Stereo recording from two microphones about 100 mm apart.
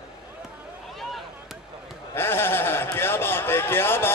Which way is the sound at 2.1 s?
20° left (ahead or behind).